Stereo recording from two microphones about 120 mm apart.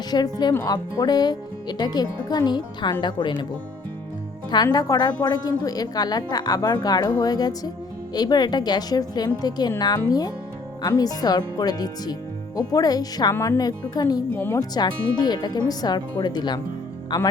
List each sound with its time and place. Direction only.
0.1 s a woman's voice: 35° left (ahead or behind)
4.5 s a woman's voice: 35° left (ahead or behind)
13.3 s speech: 20° left (ahead or behind)
13.6 s a woman's voice: 35° left (ahead or behind)
14.3 s speech: 20° left (ahead or behind)
14.6 s a woman's voice: 35° left (ahead or behind)